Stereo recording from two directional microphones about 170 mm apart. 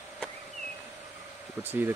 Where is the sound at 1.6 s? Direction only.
10° right (ahead or behind).